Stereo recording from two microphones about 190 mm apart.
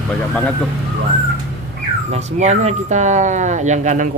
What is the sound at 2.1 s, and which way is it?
Speech, 35° right (ahead or behind).